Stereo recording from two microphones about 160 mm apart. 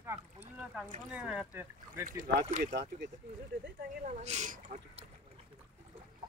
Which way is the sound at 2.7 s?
90° right.